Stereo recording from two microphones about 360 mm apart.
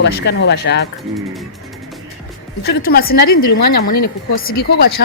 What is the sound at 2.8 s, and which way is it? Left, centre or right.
Speech, left.